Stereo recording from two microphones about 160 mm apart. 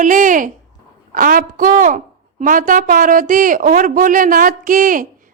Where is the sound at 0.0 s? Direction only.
55° right (ahead or behind).